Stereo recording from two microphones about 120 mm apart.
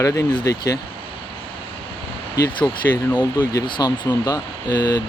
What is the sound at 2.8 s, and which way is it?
Speech, 20° left (ahead or behind).